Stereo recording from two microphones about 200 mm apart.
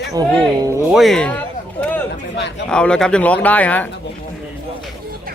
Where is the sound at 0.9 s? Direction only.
Centre (ahead or behind).